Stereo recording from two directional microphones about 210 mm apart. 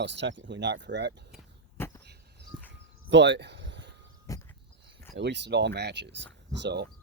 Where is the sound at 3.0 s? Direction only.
60° right (ahead or behind).